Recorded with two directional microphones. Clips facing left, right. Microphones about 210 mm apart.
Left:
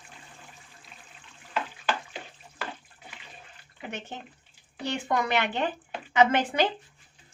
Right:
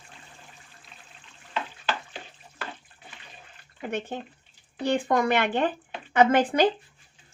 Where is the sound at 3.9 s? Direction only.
55° right (ahead or behind).